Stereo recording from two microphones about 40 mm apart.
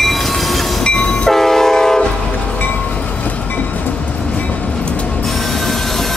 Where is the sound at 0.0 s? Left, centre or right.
Centre.